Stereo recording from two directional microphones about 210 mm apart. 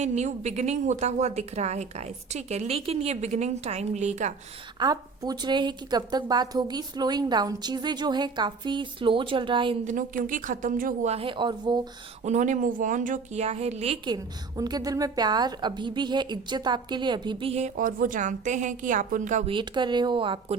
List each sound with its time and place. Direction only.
0.0 s a woman's voice: 35° right (ahead or behind)
4.8 s a woman's voice: 20° right (ahead or behind)
9.8 s a woman's voice: 40° right (ahead or behind); by 11.8 s 20° right (ahead or behind)
12.2 s a woman's voice: 35° right (ahead or behind)
19.5 s a woman's voice: 20° right (ahead or behind)